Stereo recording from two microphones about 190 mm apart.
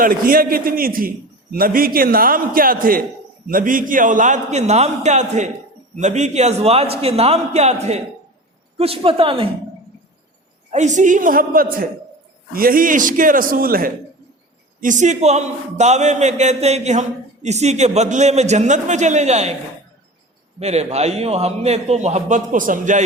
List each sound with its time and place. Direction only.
0.0 s a man's voice: 50° right (ahead or behind); by 9.5 s 30° right (ahead or behind)
10.7 s a man's voice: 40° right (ahead or behind)
20.6 s a man's voice: 35° right (ahead or behind)